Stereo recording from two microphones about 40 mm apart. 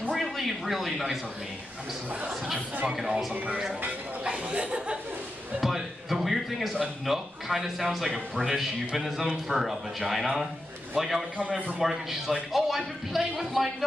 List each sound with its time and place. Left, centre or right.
0.1 s speech: centre
4.2 s speech: right
5.6 s a man's voice: centre
11.3 s a man's voice: right
11.8 s a man's voice: centre